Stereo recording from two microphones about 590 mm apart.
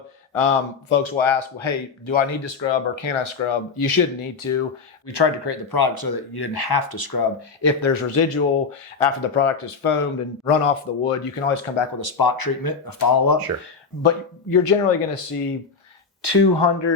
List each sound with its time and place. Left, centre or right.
0.3 s speech: left
5.0 s speech: left
11.9 s speech: left
14.0 s speech: left
16.2 s speech: left